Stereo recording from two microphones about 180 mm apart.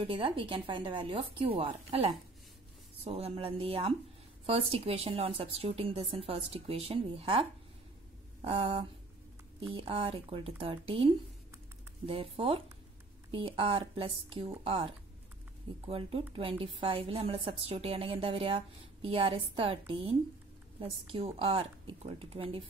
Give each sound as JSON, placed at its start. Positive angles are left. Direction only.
{"t": 0.0, "sound": "a woman's voice", "side_deg": -30}
{"t": 8.5, "sound": "a woman's voice", "side_deg": -30}
{"t": 15.9, "sound": "a woman's voice", "side_deg": -35}